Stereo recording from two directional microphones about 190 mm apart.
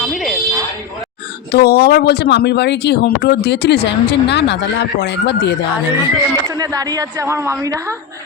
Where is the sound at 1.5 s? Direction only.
55° left (ahead or behind).